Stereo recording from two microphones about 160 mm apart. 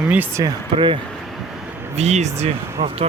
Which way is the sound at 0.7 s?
30° right (ahead or behind).